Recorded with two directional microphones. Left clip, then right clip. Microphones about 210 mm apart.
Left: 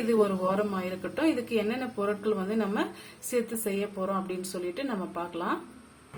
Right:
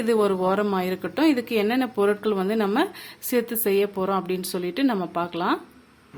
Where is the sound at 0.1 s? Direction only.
55° right (ahead or behind).